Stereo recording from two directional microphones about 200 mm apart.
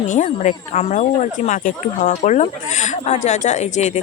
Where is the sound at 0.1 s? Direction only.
40° left (ahead or behind).